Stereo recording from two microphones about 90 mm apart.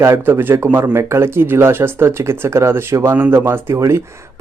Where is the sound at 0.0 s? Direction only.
30° right (ahead or behind).